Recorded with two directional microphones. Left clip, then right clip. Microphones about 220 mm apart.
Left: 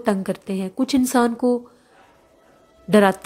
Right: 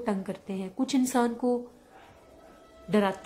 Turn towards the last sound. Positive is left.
turn(degrees=30)  # may be behind; listen again after turning